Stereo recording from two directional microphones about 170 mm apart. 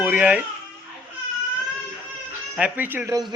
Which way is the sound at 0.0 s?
10° right (ahead or behind).